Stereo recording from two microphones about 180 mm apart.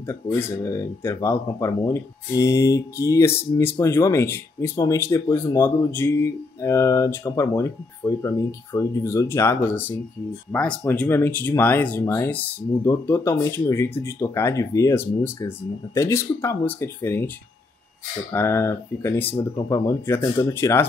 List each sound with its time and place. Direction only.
0.0 s speech: 10° left (ahead or behind)
18.3 s speech: 15° left (ahead or behind)